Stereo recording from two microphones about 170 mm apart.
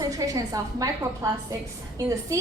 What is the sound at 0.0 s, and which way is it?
A woman's voice, 20° right (ahead or behind).